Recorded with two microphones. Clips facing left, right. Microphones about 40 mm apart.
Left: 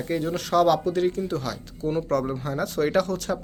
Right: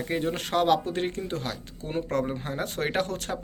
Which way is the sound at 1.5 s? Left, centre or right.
Right.